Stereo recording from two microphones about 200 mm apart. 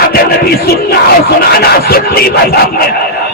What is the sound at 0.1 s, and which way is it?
Battle cry, 50° left (ahead or behind).